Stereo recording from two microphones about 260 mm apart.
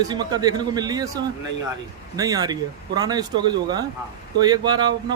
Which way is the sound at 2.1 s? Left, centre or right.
Centre.